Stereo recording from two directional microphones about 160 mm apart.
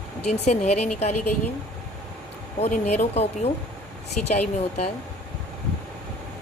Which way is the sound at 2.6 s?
45° left (ahead or behind).